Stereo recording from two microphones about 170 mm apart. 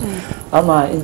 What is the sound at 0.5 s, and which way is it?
Speech, 25° right (ahead or behind).